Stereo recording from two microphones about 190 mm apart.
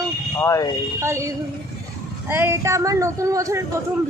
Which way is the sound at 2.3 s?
15° right (ahead or behind).